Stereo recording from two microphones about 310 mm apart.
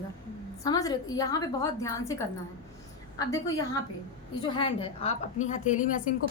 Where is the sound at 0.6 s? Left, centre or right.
Centre.